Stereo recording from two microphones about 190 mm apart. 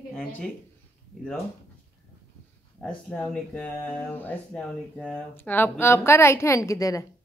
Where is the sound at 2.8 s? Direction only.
5° left (ahead or behind).